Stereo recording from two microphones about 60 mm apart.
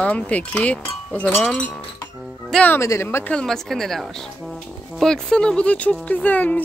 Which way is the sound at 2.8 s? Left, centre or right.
Left.